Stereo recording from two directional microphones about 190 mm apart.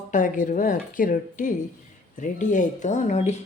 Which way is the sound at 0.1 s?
45° left (ahead or behind).